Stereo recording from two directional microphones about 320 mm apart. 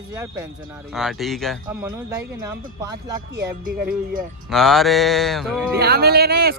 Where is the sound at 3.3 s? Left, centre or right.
Right.